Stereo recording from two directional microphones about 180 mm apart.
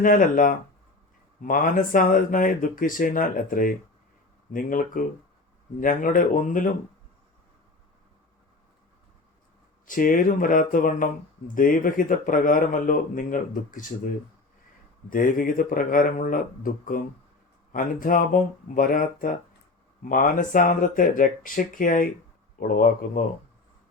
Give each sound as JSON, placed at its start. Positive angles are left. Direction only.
{"t": 0.0, "sound": "speech", "side_deg": 50}
{"t": 9.8, "sound": "speech", "side_deg": 50}
{"t": 15.1, "sound": "speech", "side_deg": 50}